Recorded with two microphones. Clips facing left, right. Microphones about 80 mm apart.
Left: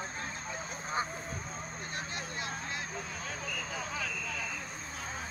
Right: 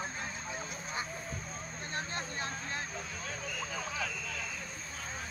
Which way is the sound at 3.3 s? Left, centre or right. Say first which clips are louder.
Left 1 dB; centre.